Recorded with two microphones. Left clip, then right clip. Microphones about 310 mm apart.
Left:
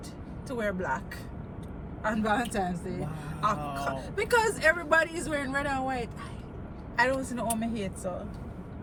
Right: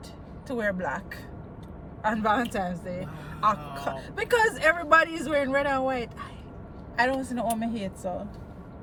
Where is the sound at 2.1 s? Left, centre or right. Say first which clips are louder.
Right 3 dB; centre.